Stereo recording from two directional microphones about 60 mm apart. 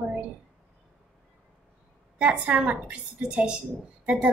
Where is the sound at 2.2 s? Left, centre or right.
Centre.